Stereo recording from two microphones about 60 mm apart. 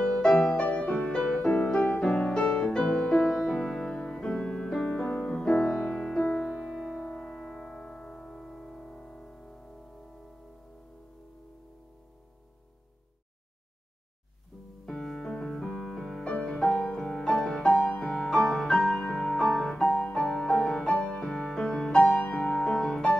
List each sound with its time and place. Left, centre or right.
0.0 s music: centre
5.1 s music: left
5.4 s music: centre
14.9 s music: centre
16.6 s music: centre